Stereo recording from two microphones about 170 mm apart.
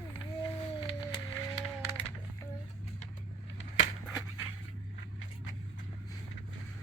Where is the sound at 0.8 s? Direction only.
30° left (ahead or behind).